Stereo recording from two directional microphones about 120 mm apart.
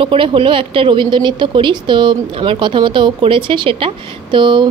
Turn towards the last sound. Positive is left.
turn(degrees=-40)  # may be behind; listen again after turning